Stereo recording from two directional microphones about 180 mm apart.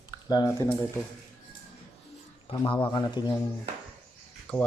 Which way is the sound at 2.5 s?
25° left (ahead or behind).